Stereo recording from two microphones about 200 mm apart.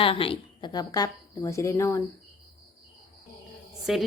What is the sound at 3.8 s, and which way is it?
Speech, centre (ahead or behind).